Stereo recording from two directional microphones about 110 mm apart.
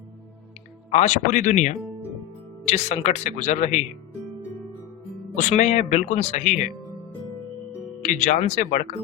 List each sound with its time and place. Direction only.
0.9 s speech: 90° left
5.5 s speech: 90° left
8.3 s speech: 90° left